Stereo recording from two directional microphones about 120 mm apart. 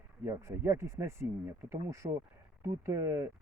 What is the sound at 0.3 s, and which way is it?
Speech, 20° right (ahead or behind).